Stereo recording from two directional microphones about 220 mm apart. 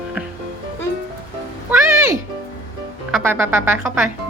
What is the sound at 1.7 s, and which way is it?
Music, 10° right (ahead or behind).